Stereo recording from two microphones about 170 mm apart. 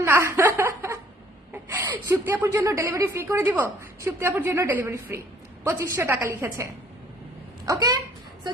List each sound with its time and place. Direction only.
0.0 s chuckle: 15° right (ahead or behind)
1.6 s a woman's voice: 20° right (ahead or behind)
7.6 s speech: 20° right (ahead or behind)